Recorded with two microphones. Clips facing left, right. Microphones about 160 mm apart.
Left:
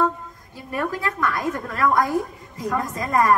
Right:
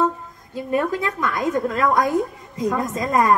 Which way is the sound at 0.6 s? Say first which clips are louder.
Right 5 dB; 20° right (ahead or behind).